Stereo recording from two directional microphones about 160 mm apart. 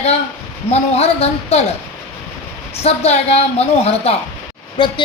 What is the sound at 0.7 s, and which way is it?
Speech, 40° left (ahead or behind).